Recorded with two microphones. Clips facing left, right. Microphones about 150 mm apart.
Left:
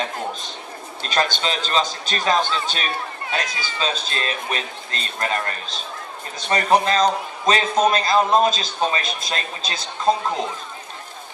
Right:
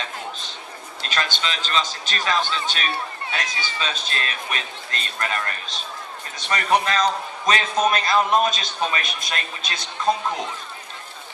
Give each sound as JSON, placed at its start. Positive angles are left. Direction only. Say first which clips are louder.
{"t": 1.1, "sound": "a man's voice", "louder": "left 5 dB", "side_deg": 35}